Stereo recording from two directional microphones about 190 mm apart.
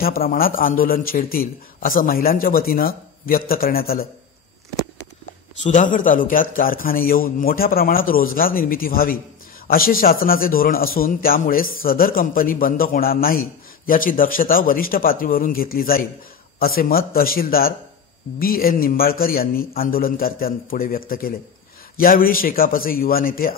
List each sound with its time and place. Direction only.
0.0 s a man's voice: 50° left (ahead or behind)
5.6 s a man's voice: 40° left (ahead or behind)